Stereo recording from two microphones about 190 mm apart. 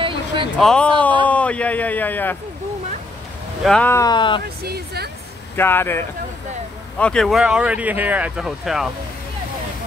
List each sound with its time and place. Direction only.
0.0 s a sound: 25° right (ahead or behind)
0.6 s a man's voice: 5° left (ahead or behind)
3.6 s speech: 5° left (ahead or behind); by 4.4 s 25° left (ahead or behind)
4.6 s speech: 55° right (ahead or behind)
5.6 s speech: 10° left (ahead or behind)